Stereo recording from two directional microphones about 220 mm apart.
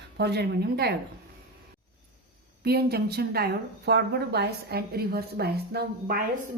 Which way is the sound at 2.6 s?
45° right (ahead or behind).